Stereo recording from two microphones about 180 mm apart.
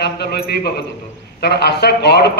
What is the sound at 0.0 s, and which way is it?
A man's voice, 65° left (ahead or behind).